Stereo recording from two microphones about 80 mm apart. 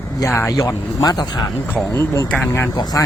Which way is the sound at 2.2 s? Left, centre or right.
Centre.